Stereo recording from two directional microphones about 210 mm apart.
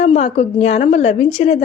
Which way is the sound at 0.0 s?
30° left (ahead or behind).